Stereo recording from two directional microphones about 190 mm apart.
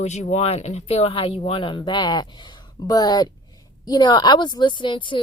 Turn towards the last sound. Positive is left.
turn(degrees=25)  # may be behind; listen again after turning